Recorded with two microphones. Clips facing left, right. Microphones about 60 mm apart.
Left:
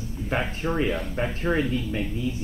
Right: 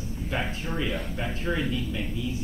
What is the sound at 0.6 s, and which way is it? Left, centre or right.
Speech, left.